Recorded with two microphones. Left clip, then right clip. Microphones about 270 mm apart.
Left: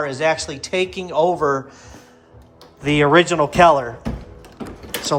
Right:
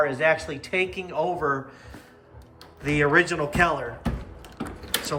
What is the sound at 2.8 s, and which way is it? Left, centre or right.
Speech, centre.